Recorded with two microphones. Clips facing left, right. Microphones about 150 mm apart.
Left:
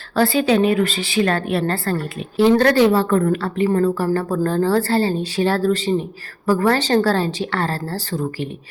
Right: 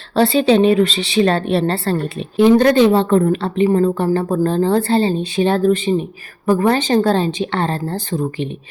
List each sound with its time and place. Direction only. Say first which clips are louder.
0.2 s a woman's voice: right 3 dB; 25° right (ahead or behind)